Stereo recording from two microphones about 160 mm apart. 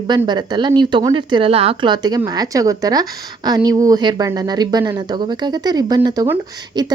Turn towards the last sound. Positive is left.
turn(degrees=-25)  # may be behind; listen again after turning